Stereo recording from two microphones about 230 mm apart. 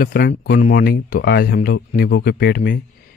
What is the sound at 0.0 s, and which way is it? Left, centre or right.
Speech, left.